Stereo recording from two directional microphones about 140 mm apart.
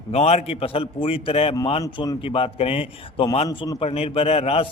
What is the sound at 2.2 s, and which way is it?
A man's voice, 45° left (ahead or behind).